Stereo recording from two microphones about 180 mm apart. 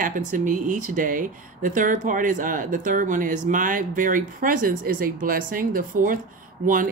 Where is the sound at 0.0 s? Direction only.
45° right (ahead or behind).